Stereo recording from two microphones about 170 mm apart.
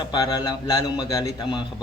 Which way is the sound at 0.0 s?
25° left (ahead or behind).